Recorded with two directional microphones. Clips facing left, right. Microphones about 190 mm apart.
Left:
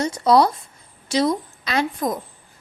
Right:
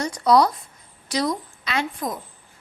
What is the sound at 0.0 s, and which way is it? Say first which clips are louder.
A woman's voice: left 2 dB; 25° left (ahead or behind).